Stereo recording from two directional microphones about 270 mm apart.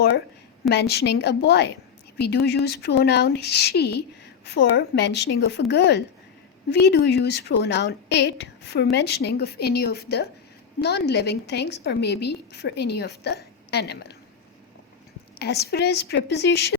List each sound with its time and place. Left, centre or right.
0.7 s a woman's voice: left
15.4 s a woman's voice: left